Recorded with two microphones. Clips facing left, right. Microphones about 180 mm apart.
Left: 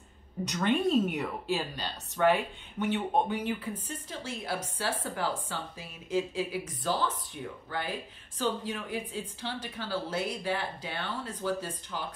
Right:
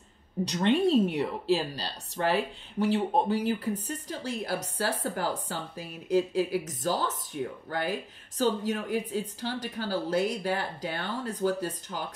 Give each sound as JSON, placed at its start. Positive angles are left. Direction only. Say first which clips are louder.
{"t": 0.5, "sound": "speech", "louder": "right 3 dB", "side_deg": -30}